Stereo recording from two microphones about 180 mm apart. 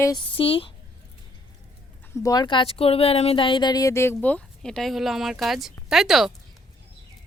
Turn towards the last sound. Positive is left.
turn(degrees=0)  # may be behind; listen again after turning